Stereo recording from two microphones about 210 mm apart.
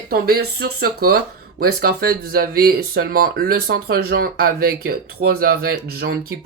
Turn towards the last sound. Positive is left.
turn(degrees=-45)  # may be behind; listen again after turning